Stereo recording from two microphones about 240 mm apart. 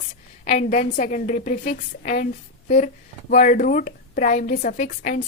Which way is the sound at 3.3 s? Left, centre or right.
Left.